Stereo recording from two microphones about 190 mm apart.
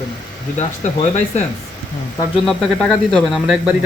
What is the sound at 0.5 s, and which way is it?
Speech, 35° left (ahead or behind).